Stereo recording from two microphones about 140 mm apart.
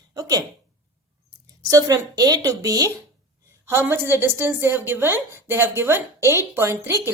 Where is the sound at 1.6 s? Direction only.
25° right (ahead or behind).